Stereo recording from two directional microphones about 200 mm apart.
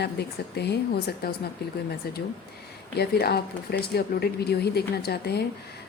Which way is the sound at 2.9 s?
50° left (ahead or behind).